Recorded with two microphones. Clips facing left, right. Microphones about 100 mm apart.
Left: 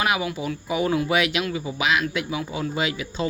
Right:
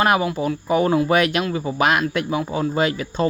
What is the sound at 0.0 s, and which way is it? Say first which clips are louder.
Speech: right 6 dB; 40° right (ahead or behind).